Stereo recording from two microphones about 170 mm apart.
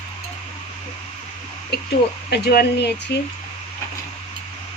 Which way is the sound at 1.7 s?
75° left (ahead or behind).